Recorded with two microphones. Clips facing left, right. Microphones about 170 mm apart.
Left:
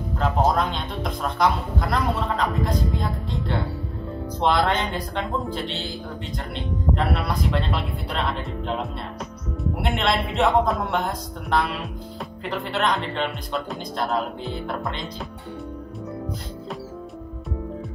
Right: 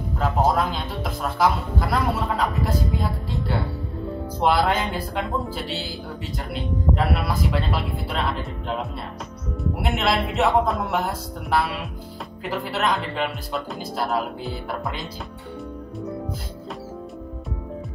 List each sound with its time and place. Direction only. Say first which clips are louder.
0.2 s speech: even; 5° right (ahead or behind)